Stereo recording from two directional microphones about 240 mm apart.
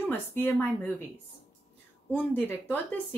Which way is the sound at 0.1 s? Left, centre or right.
Centre.